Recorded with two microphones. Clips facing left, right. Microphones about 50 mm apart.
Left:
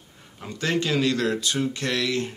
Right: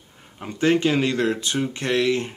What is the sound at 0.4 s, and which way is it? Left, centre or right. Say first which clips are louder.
Speech: right 6 dB; right.